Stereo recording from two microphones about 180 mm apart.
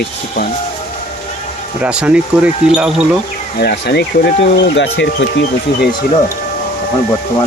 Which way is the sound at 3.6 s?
65° left (ahead or behind).